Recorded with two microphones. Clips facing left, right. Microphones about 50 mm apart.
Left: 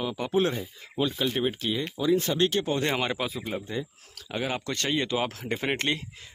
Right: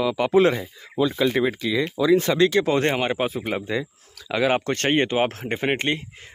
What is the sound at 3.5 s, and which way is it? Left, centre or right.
Speech, right.